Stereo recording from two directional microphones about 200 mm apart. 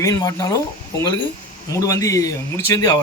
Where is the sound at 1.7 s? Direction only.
15° left (ahead or behind).